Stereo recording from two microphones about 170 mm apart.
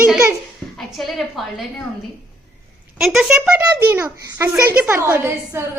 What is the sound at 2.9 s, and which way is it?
A child's voice, centre (ahead or behind).